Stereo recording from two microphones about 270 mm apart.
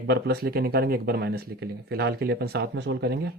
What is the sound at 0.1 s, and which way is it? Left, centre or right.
Speech, right.